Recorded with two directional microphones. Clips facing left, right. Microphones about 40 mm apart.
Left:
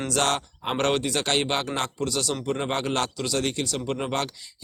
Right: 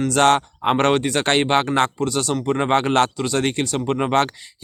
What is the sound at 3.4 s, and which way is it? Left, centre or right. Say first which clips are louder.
Speech: right 6 dB; right.